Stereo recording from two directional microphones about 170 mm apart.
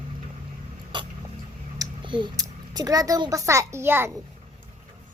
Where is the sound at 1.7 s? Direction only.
30° right (ahead or behind).